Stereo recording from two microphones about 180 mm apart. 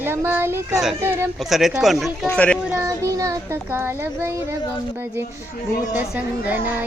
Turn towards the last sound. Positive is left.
turn(degrees=-10)  # may be behind; listen again after turning